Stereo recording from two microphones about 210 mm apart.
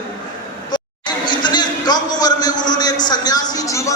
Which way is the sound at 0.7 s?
20° left (ahead or behind).